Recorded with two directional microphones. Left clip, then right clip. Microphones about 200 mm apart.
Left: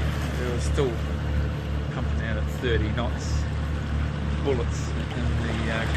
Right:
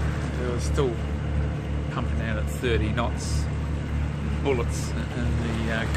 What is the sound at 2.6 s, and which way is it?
Speech, 20° right (ahead or behind).